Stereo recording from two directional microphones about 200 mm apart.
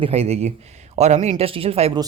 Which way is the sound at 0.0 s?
30° right (ahead or behind).